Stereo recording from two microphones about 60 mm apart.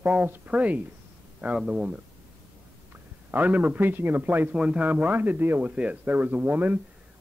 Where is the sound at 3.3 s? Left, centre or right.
Right.